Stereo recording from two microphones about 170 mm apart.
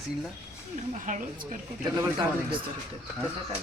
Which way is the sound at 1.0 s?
50° right (ahead or behind).